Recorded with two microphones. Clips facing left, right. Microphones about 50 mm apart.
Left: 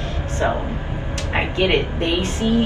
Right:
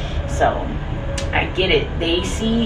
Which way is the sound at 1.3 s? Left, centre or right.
Right.